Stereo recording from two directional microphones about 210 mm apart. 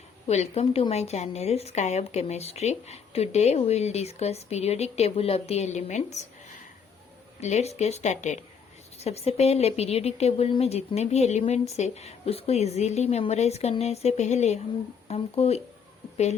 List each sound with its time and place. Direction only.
0.3 s a woman's voice: 30° left (ahead or behind)
7.4 s a woman's voice: 30° left (ahead or behind)